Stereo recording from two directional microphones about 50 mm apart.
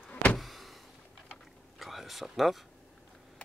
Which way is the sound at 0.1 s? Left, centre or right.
Left.